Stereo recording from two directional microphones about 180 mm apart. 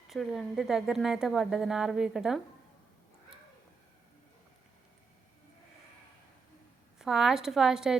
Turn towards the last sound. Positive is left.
turn(degrees=0)  # may be behind; listen again after turning